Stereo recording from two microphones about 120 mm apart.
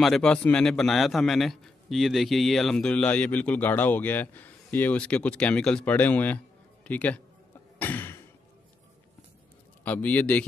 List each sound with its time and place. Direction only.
0.0 s a man's voice: 5° left (ahead or behind)
7.8 s a sound: 15° left (ahead or behind)
9.8 s a man's voice: 15° left (ahead or behind)